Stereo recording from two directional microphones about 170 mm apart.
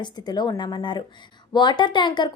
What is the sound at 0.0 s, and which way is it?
Speech, 25° left (ahead or behind).